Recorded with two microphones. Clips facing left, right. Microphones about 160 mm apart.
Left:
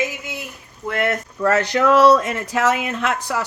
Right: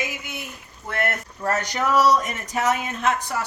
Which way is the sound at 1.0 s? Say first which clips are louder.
Left 5 dB; 90° left.